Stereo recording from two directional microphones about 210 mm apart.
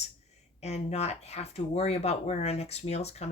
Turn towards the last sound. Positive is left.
turn(degrees=30)  # may be behind; listen again after turning